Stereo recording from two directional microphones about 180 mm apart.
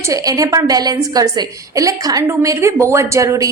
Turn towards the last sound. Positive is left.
turn(degrees=-15)  # may be behind; listen again after turning